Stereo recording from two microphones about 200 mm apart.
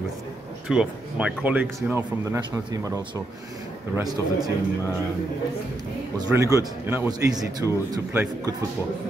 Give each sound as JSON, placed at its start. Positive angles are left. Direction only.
{"t": 0.7, "sound": "speech", "side_deg": -5}
{"t": 3.9, "sound": "a man's voice", "side_deg": -20}
{"t": 6.1, "sound": "speech", "side_deg": -15}